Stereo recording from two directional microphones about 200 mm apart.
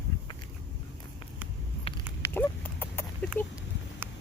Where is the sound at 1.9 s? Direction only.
30° left (ahead or behind).